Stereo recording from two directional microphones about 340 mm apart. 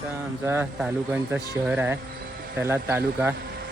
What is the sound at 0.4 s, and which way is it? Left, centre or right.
Speech, centre.